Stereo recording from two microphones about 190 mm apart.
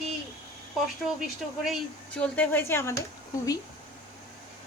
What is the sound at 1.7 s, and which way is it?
Speech, 5° left (ahead or behind).